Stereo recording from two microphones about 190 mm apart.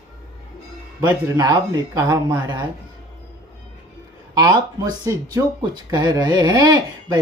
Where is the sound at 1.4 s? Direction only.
20° right (ahead or behind).